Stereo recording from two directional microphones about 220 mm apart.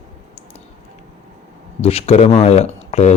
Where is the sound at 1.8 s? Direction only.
25° left (ahead or behind).